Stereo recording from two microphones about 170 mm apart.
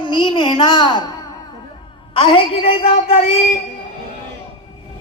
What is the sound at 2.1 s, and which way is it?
A woman's voice, 30° left (ahead or behind).